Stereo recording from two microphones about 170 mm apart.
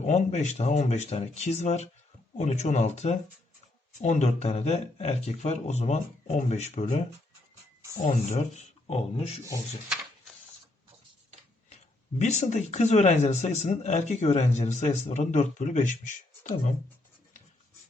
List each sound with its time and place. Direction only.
0.0 s speech: 45° left (ahead or behind)
8.0 s speech: 40° left (ahead or behind)
12.2 s speech: 45° left (ahead or behind)